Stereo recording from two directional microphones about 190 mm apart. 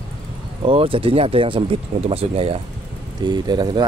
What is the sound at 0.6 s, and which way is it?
Speech, 30° right (ahead or behind).